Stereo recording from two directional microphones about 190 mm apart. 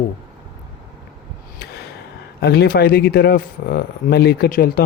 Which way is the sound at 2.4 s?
55° left (ahead or behind).